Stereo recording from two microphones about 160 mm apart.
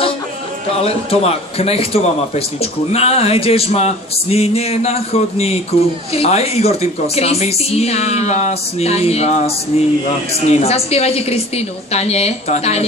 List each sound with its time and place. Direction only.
0.7 s a woman's voice: 40° left (ahead or behind)